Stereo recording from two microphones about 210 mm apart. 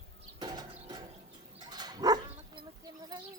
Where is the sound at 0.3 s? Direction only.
20° right (ahead or behind).